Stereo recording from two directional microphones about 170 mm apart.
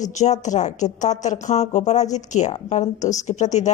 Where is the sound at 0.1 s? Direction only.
45° left (ahead or behind).